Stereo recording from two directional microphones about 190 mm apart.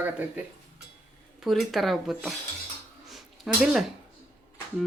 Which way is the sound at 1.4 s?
Centre (ahead or behind).